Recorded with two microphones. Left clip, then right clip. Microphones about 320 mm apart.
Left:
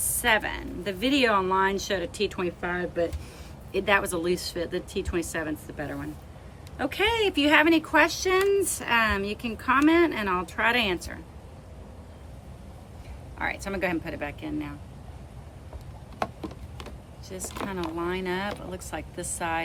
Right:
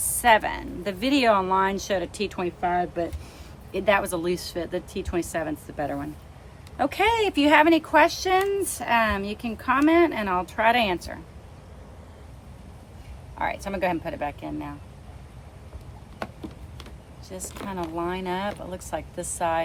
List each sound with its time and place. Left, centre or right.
0.2 s a woman's voice: centre
13.4 s a woman's voice: centre
17.2 s a woman's voice: centre